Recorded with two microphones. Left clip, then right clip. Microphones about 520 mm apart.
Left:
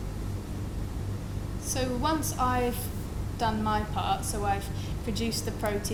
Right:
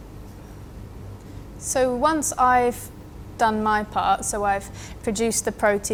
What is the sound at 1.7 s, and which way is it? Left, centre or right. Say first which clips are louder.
A woman's voice: right 9 dB; right.